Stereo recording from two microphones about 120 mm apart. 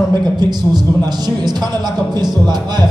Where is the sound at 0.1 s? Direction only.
35° right (ahead or behind).